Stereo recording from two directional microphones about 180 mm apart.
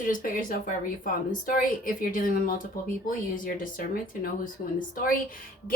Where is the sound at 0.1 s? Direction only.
50° left (ahead or behind).